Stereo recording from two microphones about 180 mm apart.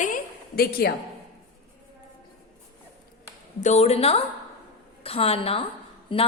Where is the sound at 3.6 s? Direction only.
40° left (ahead or behind).